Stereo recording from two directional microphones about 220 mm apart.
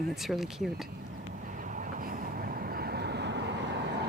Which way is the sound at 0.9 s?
40° right (ahead or behind).